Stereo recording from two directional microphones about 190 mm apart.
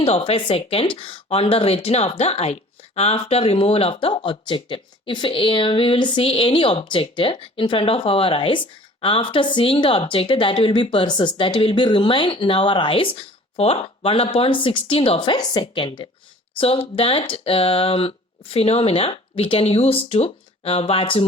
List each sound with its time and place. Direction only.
0.0 s speech: 30° left (ahead or behind)